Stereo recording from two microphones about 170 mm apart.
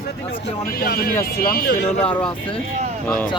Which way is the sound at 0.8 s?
65° left (ahead or behind).